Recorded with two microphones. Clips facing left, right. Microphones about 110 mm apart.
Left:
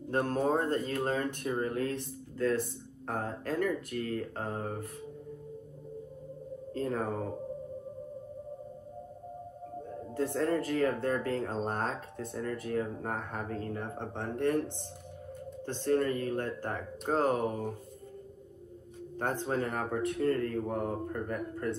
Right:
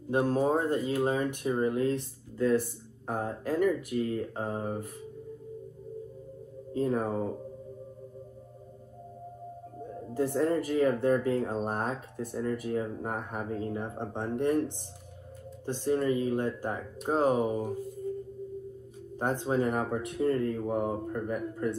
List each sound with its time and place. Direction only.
0.1 s speech: 10° right (ahead or behind)
6.7 s speech: 15° right (ahead or behind)
10.1 s speech: 15° right (ahead or behind)
15.6 s speech: 15° right (ahead or behind)
19.1 s speech: 15° right (ahead or behind)